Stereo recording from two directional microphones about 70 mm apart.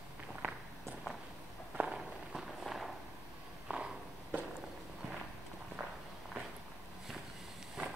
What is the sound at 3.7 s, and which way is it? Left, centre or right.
Walk, centre.